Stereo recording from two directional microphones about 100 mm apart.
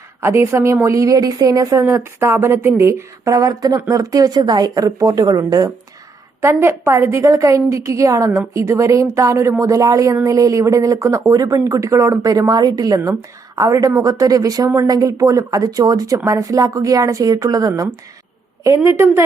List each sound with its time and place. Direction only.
0.2 s speech: 30° right (ahead or behind)
1.8 s speech: 25° right (ahead or behind)
6.4 s speech: 25° right (ahead or behind)